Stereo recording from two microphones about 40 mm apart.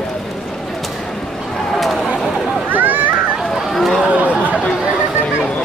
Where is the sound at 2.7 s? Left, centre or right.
Right.